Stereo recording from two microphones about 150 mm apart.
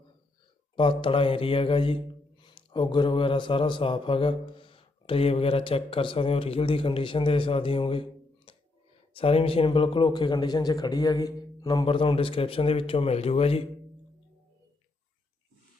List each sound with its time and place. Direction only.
0.8 s a man's voice: 35° left (ahead or behind)
8.5 s a sound: 35° left (ahead or behind)
9.1 s a man's voice: 40° left (ahead or behind)